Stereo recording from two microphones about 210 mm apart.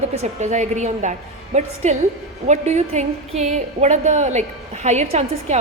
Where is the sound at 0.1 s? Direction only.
30° right (ahead or behind).